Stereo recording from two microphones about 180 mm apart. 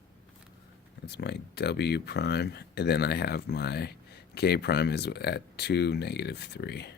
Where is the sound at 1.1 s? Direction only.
70° left (ahead or behind).